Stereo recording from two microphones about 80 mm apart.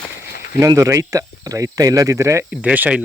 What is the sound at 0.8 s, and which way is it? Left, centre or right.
Speech, right.